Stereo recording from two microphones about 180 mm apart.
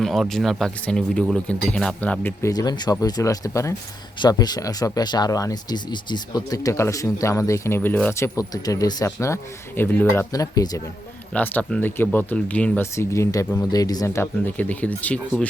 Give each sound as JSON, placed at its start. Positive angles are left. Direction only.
{"t": 0.0, "sound": "speech", "side_deg": 0}
{"t": 11.3, "sound": "speech", "side_deg": 10}